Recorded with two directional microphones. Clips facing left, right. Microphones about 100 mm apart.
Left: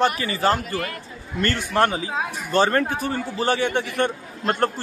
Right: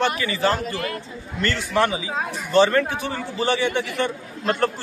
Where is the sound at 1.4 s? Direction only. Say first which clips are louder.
Left 1 dB; 50° left (ahead or behind).